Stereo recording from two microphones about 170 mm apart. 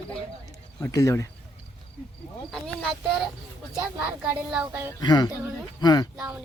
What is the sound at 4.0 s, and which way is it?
Speech, 10° right (ahead or behind).